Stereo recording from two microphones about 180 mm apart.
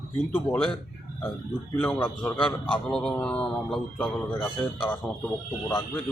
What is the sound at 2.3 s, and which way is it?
Speech, 30° left (ahead or behind).